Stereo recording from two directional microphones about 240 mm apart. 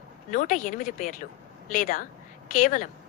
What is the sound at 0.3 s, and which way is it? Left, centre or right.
A woman's voice, left.